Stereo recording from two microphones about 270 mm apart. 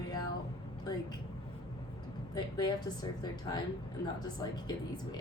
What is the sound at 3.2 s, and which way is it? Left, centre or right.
Speech, centre.